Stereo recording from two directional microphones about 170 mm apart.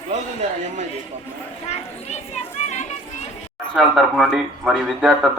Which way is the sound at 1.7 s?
40° left (ahead or behind).